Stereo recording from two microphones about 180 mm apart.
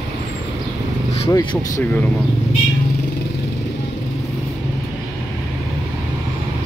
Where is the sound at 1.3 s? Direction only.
20° left (ahead or behind).